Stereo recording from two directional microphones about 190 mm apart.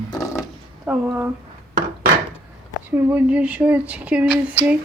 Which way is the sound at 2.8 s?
10° right (ahead or behind).